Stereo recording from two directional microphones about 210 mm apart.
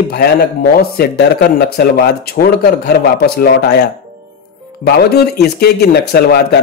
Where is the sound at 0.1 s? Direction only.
45° left (ahead or behind).